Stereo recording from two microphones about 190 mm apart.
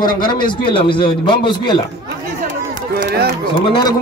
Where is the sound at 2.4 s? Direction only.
45° right (ahead or behind).